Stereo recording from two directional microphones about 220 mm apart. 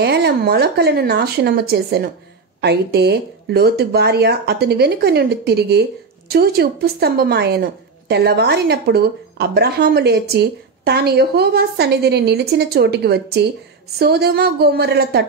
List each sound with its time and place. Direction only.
0.0 s speech: 50° right (ahead or behind)